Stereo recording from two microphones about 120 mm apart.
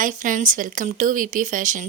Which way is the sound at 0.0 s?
90° right.